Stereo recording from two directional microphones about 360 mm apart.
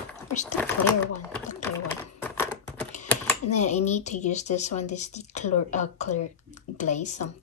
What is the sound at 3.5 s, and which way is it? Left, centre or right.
Speech, centre.